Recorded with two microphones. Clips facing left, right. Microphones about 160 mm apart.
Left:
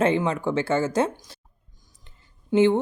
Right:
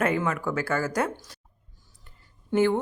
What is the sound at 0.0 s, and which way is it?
Speech, 25° left (ahead or behind).